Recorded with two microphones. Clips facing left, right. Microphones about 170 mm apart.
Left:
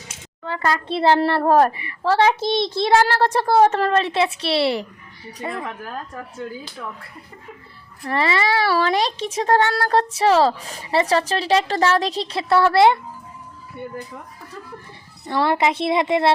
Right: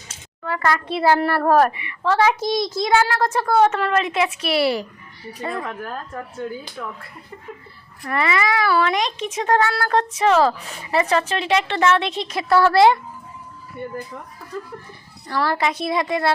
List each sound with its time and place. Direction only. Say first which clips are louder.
0.4 s a child's voice: right 1 dB; 25° left (ahead or behind)
8.0 s speech: left 1 dB; 30° left (ahead or behind)
15.3 s a child's voice: left 3 dB; 25° left (ahead or behind)